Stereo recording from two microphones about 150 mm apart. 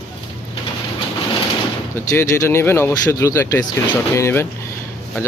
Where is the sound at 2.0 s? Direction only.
20° left (ahead or behind).